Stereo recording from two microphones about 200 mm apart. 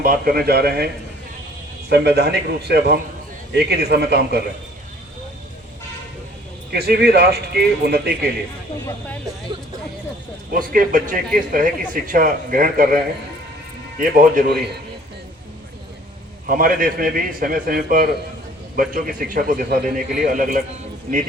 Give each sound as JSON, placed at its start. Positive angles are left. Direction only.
{"t": 0.0, "sound": "speech", "side_deg": -45}
{"t": 1.9, "sound": "a man's voice", "side_deg": -55}
{"t": 6.7, "sound": "speech", "side_deg": -50}
{"t": 10.5, "sound": "speech", "side_deg": -45}
{"t": 14.0, "sound": "speech", "side_deg": -45}
{"t": 16.5, "sound": "speech", "side_deg": -45}